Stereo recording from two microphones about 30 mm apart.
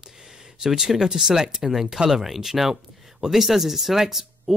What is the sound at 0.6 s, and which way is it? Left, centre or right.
Speech, right.